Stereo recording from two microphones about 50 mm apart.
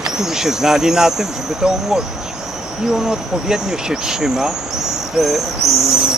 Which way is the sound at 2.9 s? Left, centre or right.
Centre.